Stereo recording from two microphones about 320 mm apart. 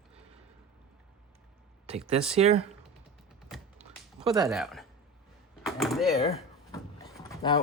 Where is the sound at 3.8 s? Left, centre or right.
Centre.